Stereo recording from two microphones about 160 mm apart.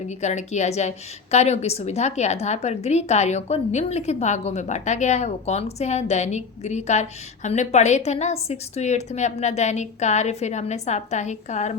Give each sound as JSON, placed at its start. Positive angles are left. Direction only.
{"t": 0.1, "sound": "a woman's voice", "side_deg": 45}